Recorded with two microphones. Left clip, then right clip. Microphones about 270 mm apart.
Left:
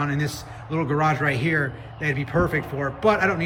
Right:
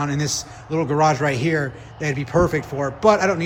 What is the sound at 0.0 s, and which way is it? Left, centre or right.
A man's voice, centre.